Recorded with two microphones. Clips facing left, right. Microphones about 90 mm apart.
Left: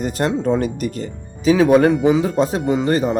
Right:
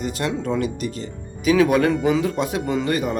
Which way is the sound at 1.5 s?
30° left (ahead or behind).